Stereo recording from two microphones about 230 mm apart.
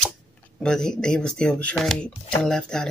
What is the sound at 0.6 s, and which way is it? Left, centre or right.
Speech, centre.